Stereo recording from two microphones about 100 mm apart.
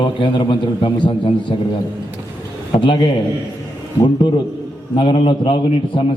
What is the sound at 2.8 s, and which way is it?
A man's voice, 50° left (ahead or behind).